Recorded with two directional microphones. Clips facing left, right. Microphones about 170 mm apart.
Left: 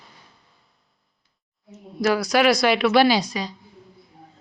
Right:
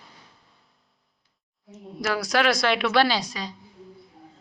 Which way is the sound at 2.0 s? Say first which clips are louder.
Left 7 dB; centre (ahead or behind).